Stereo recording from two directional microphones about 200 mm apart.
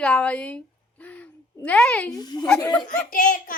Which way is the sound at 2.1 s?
20° left (ahead or behind).